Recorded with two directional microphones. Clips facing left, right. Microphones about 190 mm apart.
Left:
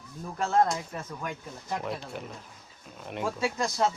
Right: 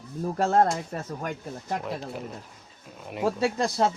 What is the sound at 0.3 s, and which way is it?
Speech, 40° right (ahead or behind).